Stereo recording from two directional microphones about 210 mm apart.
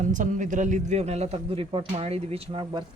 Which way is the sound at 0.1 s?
35° right (ahead or behind).